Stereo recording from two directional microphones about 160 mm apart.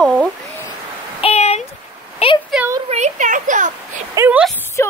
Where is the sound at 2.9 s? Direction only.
50° right (ahead or behind).